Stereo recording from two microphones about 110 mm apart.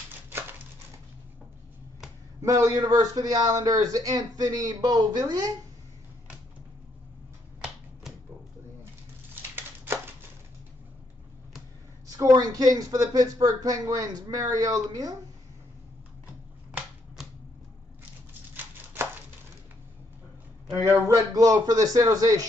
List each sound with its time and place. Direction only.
0.3 s a sound: 20° right (ahead or behind)
2.4 s a man's voice: 30° right (ahead or behind)
9.3 s a sound: 20° right (ahead or behind)
12.2 s a man's voice: 35° right (ahead or behind)
18.6 s chopping: 15° right (ahead or behind)
20.8 s a man's voice: 30° right (ahead or behind)